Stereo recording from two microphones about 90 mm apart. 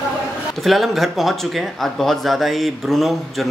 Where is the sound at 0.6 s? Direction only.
Centre (ahead or behind).